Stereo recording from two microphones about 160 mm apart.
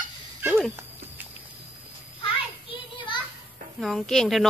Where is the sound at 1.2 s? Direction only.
10° right (ahead or behind).